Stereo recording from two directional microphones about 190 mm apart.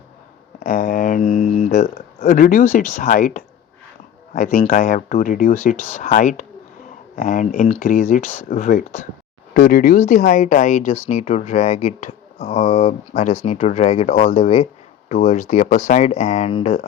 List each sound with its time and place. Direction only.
0.6 s speech: 45° left (ahead or behind)
5.7 s speech: 10° left (ahead or behind)
6.0 s speech: 45° left (ahead or behind)